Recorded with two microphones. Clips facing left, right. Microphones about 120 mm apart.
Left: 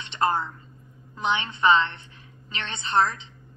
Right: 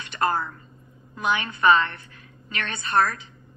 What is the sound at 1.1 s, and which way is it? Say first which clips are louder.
A woman's voice: right 1 dB; 25° left (ahead or behind).